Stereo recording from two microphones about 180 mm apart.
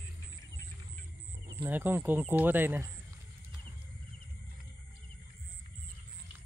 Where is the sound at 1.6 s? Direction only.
10° right (ahead or behind).